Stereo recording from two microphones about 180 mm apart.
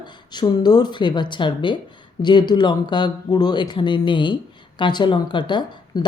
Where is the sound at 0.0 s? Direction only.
25° left (ahead or behind).